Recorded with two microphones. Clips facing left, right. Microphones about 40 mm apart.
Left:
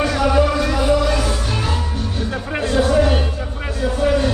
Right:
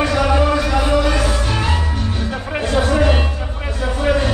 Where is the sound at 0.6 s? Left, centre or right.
Right.